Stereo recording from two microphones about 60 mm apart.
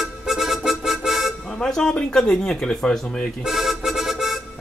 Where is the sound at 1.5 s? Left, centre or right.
Centre.